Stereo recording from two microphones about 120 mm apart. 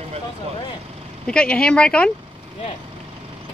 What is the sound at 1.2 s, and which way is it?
Speech, 10° left (ahead or behind).